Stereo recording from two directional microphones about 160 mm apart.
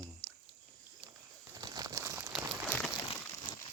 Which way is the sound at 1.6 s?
25° right (ahead or behind).